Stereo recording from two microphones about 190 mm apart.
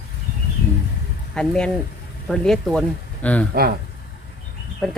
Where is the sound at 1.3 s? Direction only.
5° left (ahead or behind).